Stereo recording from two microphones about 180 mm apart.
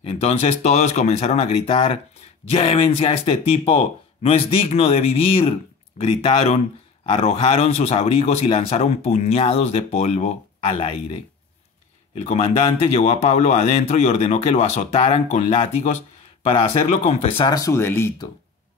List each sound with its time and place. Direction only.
0.0 s speech: 35° left (ahead or behind)
12.2 s speech: 35° left (ahead or behind); by 18.3 s 15° left (ahead or behind)